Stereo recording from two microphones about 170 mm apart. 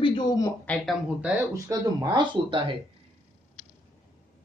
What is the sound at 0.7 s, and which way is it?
Speech, 10° left (ahead or behind).